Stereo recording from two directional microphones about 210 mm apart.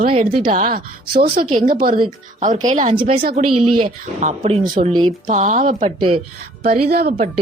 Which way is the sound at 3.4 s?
90° right.